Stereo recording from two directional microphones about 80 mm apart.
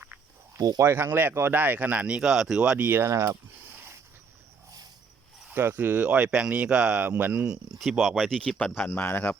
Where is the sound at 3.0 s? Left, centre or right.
Right.